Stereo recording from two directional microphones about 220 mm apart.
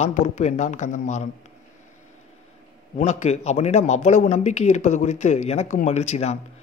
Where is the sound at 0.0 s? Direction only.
30° left (ahead or behind).